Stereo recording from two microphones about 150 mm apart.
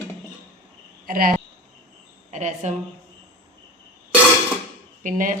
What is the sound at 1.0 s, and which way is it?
Speech, 70° right (ahead or behind).